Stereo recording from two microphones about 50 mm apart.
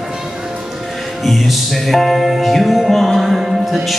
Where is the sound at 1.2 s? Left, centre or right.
Centre.